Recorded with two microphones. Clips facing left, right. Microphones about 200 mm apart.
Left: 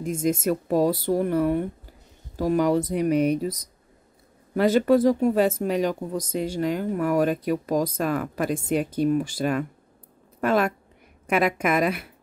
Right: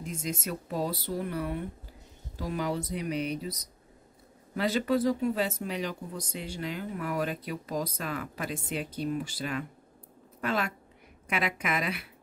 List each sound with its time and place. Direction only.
0.0 s speech: 50° left (ahead or behind)